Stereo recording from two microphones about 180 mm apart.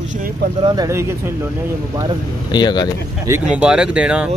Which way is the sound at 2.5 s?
25° left (ahead or behind).